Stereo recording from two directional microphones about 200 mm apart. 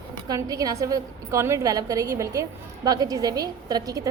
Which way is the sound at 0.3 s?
15° right (ahead or behind).